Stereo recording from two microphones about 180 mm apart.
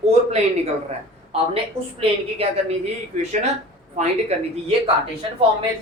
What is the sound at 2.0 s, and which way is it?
A woman's voice, 35° right (ahead or behind).